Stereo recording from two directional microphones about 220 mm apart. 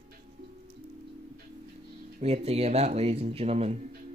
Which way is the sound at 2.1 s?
30° right (ahead or behind).